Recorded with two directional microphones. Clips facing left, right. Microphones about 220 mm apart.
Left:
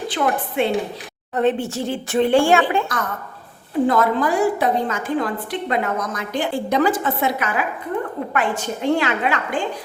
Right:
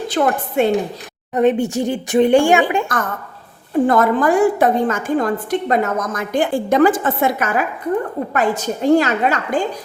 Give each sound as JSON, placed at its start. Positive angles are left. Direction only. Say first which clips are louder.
{"t": 0.1, "sound": "a woman's voice", "louder": "right 5 dB", "side_deg": -45}
{"t": 1.3, "sound": "speech", "louder": "right 4 dB", "side_deg": -15}
{"t": 3.8, "sound": "a woman's voice", "louder": "right 3 dB", "side_deg": -50}